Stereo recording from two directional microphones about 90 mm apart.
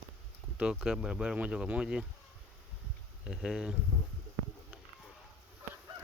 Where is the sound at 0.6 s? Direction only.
10° right (ahead or behind).